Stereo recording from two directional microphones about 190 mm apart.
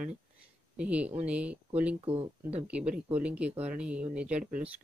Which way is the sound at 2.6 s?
5° right (ahead or behind).